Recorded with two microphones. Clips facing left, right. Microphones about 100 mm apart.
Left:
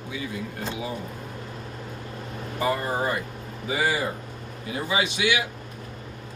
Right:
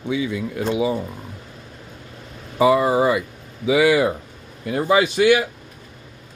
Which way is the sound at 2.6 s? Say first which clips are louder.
Right 10 dB; 90° right.